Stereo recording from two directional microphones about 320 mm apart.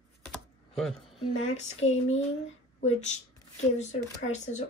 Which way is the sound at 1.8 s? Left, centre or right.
Centre.